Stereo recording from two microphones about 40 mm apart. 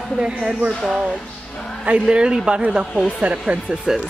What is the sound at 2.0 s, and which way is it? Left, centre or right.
Speech, right.